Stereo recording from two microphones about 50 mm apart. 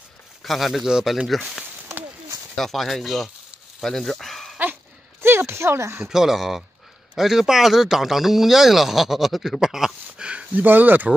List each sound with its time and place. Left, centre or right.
0.4 s speech: centre
5.2 s speech: right
6.0 s speech: centre
10.5 s speech: right